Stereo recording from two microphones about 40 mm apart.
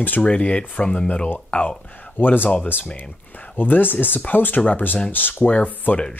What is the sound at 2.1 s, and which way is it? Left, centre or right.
Speech, left.